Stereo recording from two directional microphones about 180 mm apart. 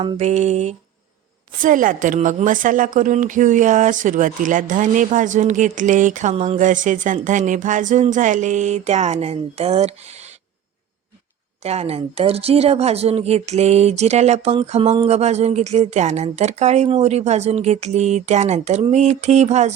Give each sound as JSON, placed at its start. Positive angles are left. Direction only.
{"t": 0.0, "sound": "a woman's voice", "side_deg": -40}
{"t": 11.6, "sound": "a woman's voice", "side_deg": -35}